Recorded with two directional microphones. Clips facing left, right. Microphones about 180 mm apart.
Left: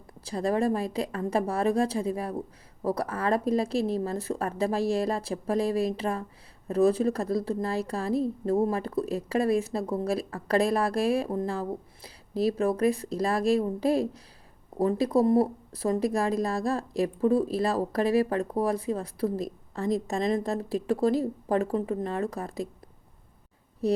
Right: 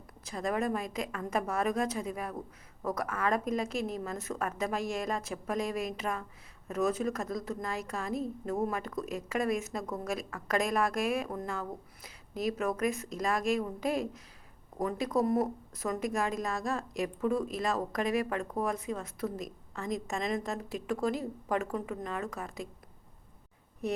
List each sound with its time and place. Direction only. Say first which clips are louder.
0.3 s speech: left 6 dB; 30° left (ahead or behind)
23.8 s speech: left 8 dB; 35° left (ahead or behind)